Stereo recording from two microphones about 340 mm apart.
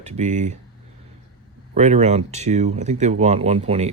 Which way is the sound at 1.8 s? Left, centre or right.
Centre.